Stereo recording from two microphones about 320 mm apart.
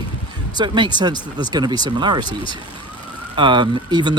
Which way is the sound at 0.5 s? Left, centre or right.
Centre.